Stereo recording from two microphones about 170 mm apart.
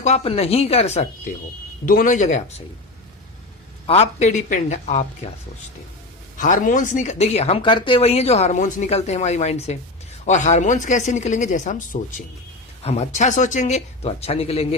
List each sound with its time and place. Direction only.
0.0 s speech: 40° left (ahead or behind)
3.8 s speech: 40° left (ahead or behind)
6.3 s speech: 50° left (ahead or behind)